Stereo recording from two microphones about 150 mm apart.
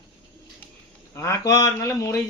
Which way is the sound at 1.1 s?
20° left (ahead or behind).